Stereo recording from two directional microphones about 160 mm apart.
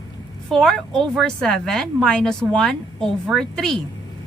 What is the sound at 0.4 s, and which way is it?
Speech, centre (ahead or behind).